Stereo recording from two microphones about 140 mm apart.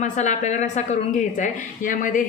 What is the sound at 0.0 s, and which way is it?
A woman's voice, 55° left (ahead or behind).